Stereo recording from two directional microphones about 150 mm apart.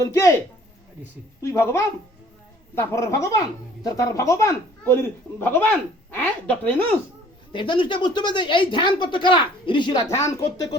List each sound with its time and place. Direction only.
0.0 s speech: 20° left (ahead or behind)
7.5 s speech: 35° left (ahead or behind)